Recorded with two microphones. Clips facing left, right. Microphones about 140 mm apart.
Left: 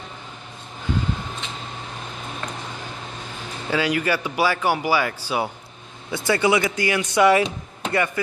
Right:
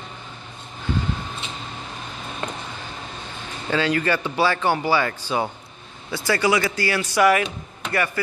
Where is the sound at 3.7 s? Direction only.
10° left (ahead or behind).